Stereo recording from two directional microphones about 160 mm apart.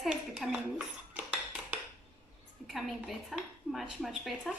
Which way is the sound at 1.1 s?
5° right (ahead or behind).